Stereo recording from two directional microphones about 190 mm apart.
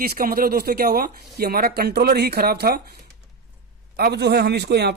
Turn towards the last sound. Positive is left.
turn(degrees=-60)  # may be behind; listen again after turning